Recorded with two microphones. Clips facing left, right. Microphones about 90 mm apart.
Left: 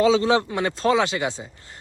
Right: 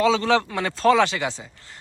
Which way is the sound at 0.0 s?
30° left (ahead or behind).